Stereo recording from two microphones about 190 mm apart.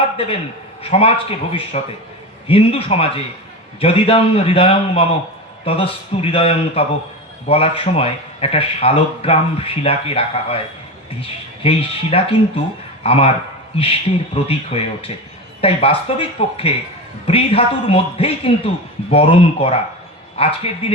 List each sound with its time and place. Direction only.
0.8 s speech: 30° left (ahead or behind)